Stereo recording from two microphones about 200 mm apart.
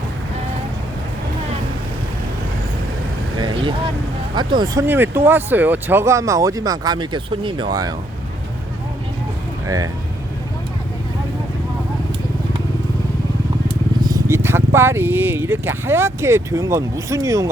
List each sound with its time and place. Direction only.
3.3 s vehicle: 25° right (ahead or behind)
4.4 s speech: 20° right (ahead or behind)
9.6 s speech: 15° right (ahead or behind)
14.0 s speech: 15° right (ahead or behind)